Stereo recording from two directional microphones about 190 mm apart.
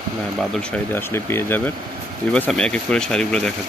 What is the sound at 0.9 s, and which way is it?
Speech, 15° left (ahead or behind).